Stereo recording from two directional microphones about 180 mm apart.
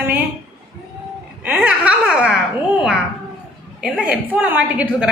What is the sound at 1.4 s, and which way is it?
Speech, 5° right (ahead or behind).